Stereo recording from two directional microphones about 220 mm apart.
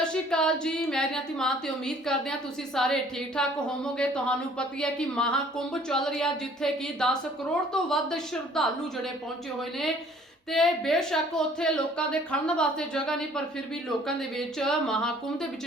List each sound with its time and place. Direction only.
0.0 s speech: 5° left (ahead or behind)
10.5 s speech: centre (ahead or behind)